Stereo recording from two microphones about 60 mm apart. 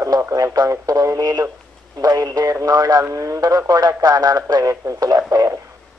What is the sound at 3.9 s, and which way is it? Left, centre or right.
Speech, right.